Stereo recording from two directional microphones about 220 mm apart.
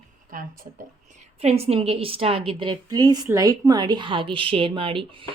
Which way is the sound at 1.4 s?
30° right (ahead or behind).